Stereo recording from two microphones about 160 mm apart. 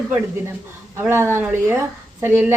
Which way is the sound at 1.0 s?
15° right (ahead or behind).